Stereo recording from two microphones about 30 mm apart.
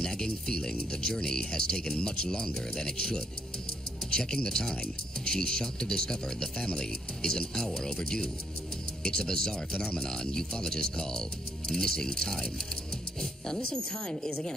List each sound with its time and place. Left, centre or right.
0.0 s speech: left
9.0 s speech: left
14.0 s speech: left